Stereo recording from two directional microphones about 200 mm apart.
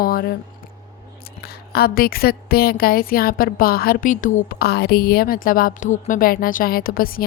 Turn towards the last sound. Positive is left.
turn(degrees=45)  # may be behind; listen again after turning